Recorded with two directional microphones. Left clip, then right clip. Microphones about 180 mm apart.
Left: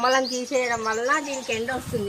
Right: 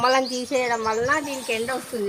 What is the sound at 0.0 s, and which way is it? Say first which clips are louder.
A woman's voice: right 1 dB; 25° right (ahead or behind).